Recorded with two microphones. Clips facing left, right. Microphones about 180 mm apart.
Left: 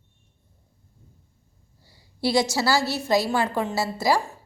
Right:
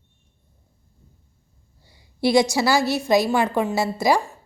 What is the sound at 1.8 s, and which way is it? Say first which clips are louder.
A woman's voice: right 4 dB; 20° right (ahead or behind).